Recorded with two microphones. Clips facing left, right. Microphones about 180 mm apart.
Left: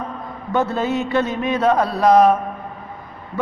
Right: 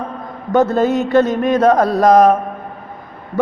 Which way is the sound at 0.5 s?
45° right (ahead or behind).